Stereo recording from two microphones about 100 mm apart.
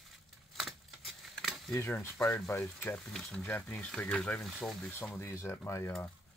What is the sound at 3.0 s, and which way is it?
Speech, 5° left (ahead or behind).